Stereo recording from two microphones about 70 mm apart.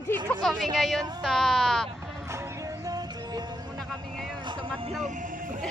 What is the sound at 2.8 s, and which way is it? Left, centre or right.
Music, right.